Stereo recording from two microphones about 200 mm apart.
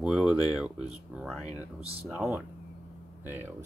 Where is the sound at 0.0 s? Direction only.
5° right (ahead or behind).